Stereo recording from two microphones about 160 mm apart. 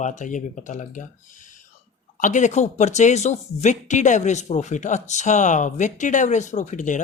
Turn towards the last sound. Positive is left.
turn(degrees=50)  # may be behind; listen again after turning